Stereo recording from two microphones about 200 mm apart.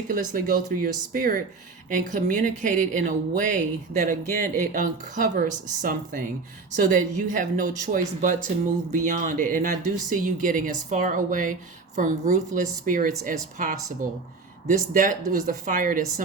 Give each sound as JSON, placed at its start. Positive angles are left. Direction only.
{"t": 0.1, "sound": "a woman's voice", "side_deg": -45}
{"t": 15.4, "sound": "a woman's voice", "side_deg": -40}